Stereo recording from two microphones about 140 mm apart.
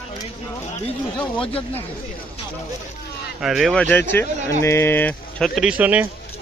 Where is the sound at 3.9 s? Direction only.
15° left (ahead or behind).